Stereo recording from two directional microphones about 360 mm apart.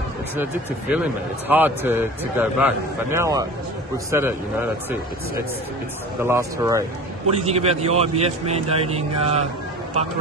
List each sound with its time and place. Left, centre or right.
0.4 s a man's voice: centre
6.2 s a man's voice: centre